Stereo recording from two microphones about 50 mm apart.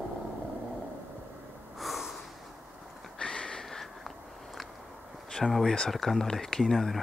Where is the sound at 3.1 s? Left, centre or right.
Centre.